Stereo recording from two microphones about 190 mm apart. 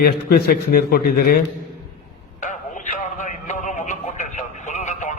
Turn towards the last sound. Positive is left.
turn(degrees=40)  # may be behind; listen again after turning